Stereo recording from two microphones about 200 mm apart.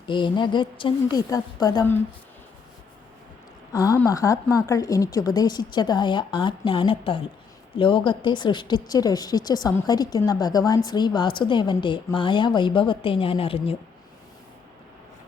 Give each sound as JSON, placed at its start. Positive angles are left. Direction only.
{"t": 0.0, "sound": "a woman's voice", "side_deg": 25}
{"t": 3.7, "sound": "a woman's voice", "side_deg": 15}